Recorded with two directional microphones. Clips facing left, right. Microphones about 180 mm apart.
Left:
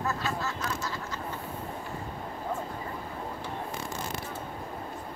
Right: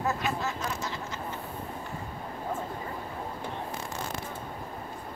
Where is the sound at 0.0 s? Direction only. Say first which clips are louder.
Right 2 dB; 20° right (ahead or behind).